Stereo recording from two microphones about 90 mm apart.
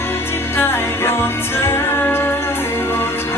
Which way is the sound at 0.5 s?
25° left (ahead or behind).